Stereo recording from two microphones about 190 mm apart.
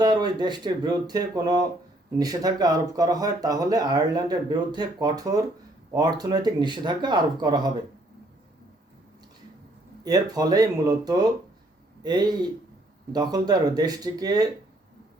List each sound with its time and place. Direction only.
0.0 s speech: 20° right (ahead or behind)
10.0 s speech: 20° right (ahead or behind)